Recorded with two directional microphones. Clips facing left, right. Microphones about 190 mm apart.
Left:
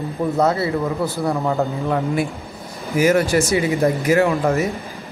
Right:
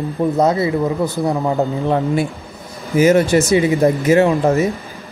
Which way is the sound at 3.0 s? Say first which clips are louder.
Right 4 dB; 25° right (ahead or behind).